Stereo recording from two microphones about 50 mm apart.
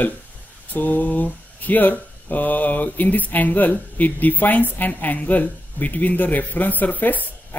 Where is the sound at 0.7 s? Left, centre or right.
Left.